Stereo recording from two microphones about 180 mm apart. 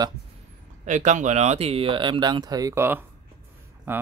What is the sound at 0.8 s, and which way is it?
Speech, 45° right (ahead or behind).